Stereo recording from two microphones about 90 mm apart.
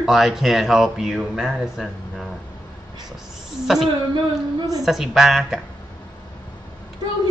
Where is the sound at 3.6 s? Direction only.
5° right (ahead or behind).